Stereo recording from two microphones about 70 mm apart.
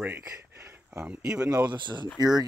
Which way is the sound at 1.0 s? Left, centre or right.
Centre.